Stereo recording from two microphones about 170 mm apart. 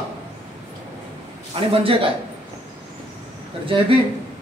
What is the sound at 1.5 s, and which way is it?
Speech, 35° right (ahead or behind).